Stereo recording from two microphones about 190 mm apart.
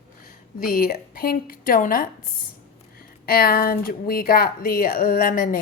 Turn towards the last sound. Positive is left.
turn(degrees=50)  # may be behind; listen again after turning